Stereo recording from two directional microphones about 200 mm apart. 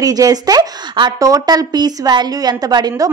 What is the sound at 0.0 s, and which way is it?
A woman's voice, 20° right (ahead or behind).